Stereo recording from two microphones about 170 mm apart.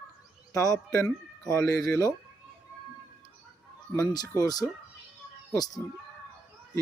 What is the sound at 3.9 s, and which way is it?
Speech, 20° left (ahead or behind).